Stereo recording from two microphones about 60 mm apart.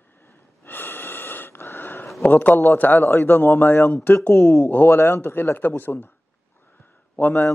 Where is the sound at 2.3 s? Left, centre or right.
Left.